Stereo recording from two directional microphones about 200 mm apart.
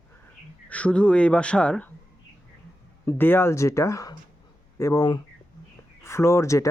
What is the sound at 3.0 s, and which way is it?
Speech, 10° left (ahead or behind).